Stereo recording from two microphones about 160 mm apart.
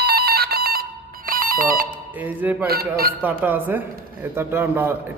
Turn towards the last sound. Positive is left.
turn(degrees=-15)  # may be behind; listen again after turning